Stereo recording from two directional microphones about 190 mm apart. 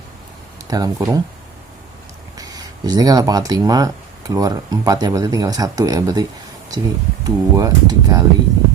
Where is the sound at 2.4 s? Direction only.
20° right (ahead or behind).